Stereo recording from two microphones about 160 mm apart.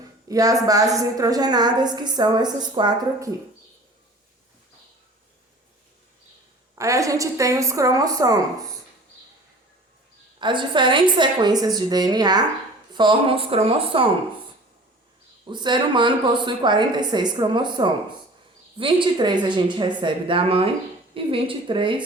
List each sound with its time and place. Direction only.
0.3 s a woman's voice: 20° right (ahead or behind)
6.7 s a woman's voice: 20° right (ahead or behind)
10.4 s a woman's voice: 30° right (ahead or behind)
15.4 s a woman's voice: 30° right (ahead or behind)